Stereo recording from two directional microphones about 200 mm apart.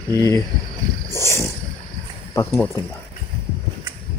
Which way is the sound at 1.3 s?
15° left (ahead or behind).